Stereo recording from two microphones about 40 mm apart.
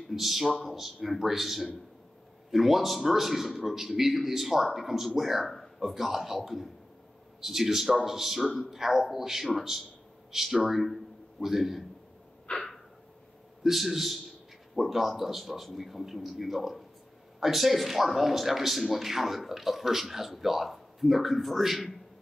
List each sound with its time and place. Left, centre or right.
0.1 s a man's voice: centre
12.5 s a sound: left
13.7 s a man's voice: centre